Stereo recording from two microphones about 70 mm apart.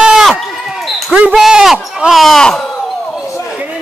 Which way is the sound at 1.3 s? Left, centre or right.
Centre.